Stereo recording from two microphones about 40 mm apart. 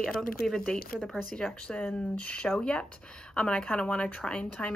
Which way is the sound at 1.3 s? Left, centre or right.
Left.